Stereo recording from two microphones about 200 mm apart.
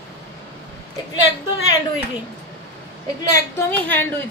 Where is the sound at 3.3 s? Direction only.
10° left (ahead or behind).